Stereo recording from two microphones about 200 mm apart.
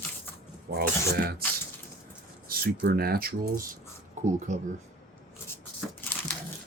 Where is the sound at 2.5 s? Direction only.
50° right (ahead or behind).